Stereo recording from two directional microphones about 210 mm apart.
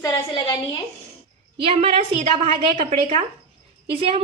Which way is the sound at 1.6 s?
25° right (ahead or behind).